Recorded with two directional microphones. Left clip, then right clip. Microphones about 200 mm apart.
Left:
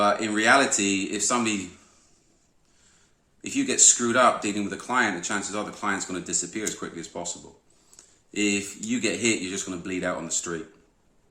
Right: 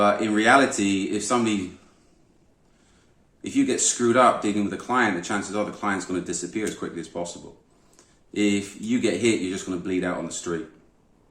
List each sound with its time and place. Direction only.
0.0 s speech: 20° left (ahead or behind)
3.4 s speech: 20° left (ahead or behind)